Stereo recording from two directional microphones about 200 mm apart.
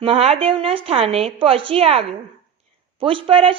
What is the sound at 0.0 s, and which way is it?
A woman's voice, 30° right (ahead or behind).